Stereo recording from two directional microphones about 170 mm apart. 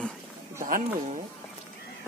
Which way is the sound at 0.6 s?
55° right (ahead or behind).